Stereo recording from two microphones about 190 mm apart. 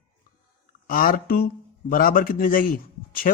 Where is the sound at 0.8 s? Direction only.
50° left (ahead or behind).